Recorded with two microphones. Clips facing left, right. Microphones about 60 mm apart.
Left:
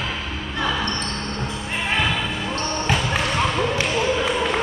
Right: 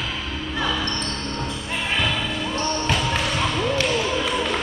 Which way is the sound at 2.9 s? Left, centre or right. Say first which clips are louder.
Left 4 dB; centre.